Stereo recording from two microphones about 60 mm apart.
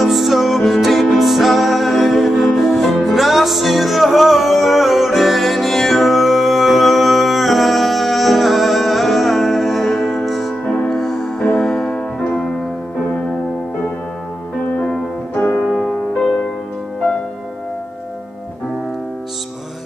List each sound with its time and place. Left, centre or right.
0.0 s music: centre
11.4 s music: centre
14.8 s music: left
15.8 s music: centre